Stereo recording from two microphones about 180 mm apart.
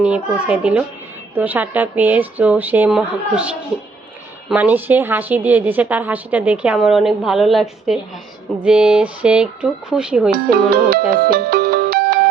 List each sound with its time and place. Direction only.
0.0 s a woman's voice: 5° right (ahead or behind)
10.3 s speech: 55° right (ahead or behind)
11.2 s ringtone: 55° right (ahead or behind)